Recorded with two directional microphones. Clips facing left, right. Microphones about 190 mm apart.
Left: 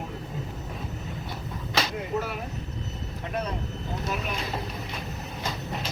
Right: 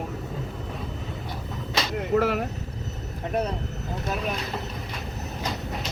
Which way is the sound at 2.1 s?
85° right.